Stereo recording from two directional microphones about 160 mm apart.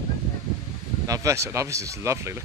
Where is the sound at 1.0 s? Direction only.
20° right (ahead or behind).